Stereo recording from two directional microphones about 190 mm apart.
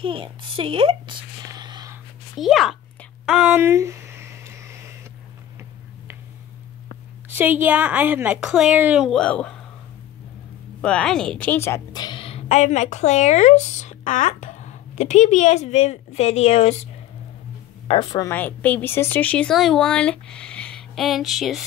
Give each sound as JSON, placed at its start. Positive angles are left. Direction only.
{"t": 0.0, "sound": "a woman's voice", "side_deg": -25}
{"t": 2.3, "sound": "a sound", "side_deg": 0}
{"t": 7.2, "sound": "a woman's voice", "side_deg": -10}
{"t": 10.8, "sound": "a woman's voice", "side_deg": 5}
{"t": 17.8, "sound": "a woman's voice", "side_deg": 25}
{"t": 18.3, "sound": "a woman's voice", "side_deg": 10}